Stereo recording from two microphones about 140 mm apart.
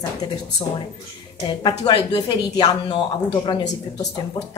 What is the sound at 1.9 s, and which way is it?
A woman's voice, 30° left (ahead or behind).